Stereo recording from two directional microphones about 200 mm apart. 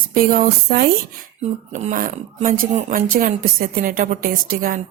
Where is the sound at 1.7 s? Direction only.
40° right (ahead or behind).